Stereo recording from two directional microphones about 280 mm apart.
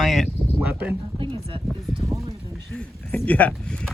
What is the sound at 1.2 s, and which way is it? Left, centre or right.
Speech, centre.